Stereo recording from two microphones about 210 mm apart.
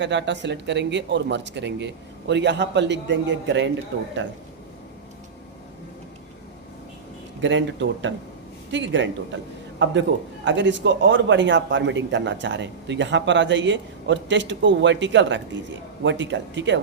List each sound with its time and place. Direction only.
0.0 s a man's voice: 60° right (ahead or behind)
7.4 s a man's voice: 60° right (ahead or behind)